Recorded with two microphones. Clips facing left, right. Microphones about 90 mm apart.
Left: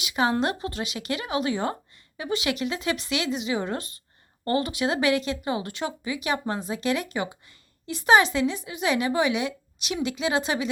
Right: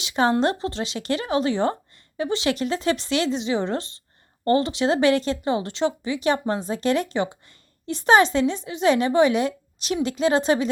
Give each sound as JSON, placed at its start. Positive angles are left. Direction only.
{"t": 0.0, "sound": "a woman's voice", "side_deg": -35}